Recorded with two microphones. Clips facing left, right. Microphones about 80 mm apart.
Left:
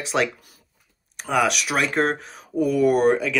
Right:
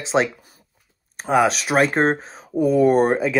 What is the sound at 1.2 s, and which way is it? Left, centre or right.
Speech, right.